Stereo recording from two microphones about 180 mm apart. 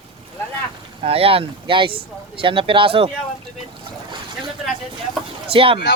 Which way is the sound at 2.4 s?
30° right (ahead or behind).